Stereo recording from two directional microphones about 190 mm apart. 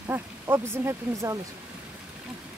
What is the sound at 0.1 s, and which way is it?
Speech, 10° right (ahead or behind).